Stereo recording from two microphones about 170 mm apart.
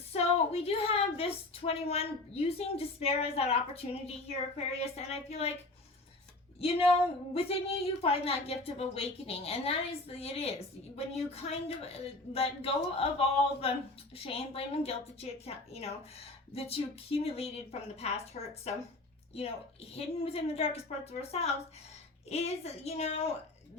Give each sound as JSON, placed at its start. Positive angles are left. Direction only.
{"t": 0.1, "sound": "a woman's voice", "side_deg": 35}
{"t": 6.6, "sound": "a woman's voice", "side_deg": 35}